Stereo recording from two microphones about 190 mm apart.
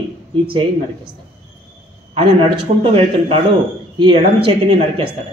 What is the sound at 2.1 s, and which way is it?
Speech, 30° right (ahead or behind).